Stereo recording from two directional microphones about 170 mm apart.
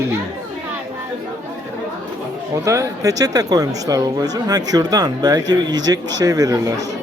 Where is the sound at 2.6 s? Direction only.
20° right (ahead or behind).